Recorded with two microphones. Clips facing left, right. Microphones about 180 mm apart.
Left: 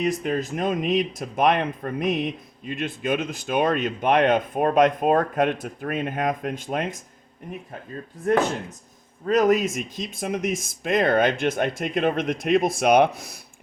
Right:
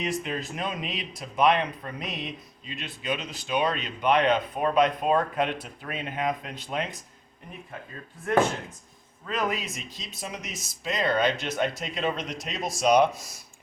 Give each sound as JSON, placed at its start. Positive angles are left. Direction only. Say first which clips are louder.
{"t": 0.0, "sound": "speech", "louder": "left 6 dB", "side_deg": 45}
{"t": 9.2, "sound": "speech", "louder": "left 11 dB", "side_deg": 40}